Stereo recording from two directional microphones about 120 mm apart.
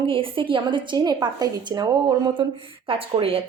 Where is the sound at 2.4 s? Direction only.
50° right (ahead or behind).